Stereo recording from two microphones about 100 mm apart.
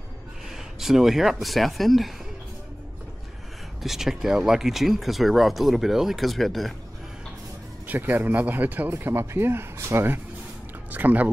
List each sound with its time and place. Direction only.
0.5 s speech: 5° right (ahead or behind)
3.8 s speech: 5° right (ahead or behind)
7.8 s speech: 20° right (ahead or behind)